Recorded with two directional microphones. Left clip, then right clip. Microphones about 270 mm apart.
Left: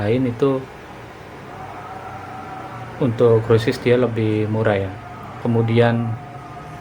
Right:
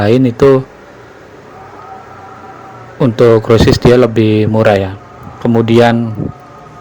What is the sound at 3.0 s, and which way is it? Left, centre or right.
Speech, right.